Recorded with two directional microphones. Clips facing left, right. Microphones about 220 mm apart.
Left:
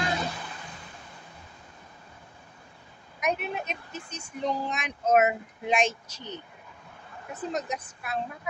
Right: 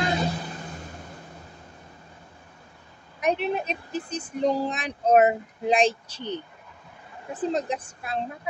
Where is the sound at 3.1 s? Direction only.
30° right (ahead or behind).